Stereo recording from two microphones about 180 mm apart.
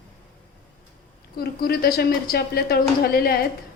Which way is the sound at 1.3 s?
60° left (ahead or behind).